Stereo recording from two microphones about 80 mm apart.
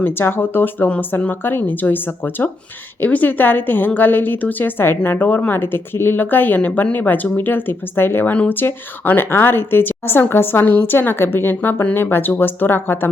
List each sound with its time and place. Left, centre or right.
0.0 s a woman's voice: left